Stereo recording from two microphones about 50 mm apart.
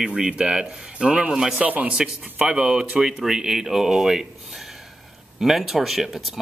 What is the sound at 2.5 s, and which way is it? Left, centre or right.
Speech, centre.